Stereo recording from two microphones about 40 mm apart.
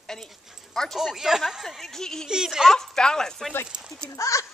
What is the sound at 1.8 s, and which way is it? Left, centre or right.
Speech, centre.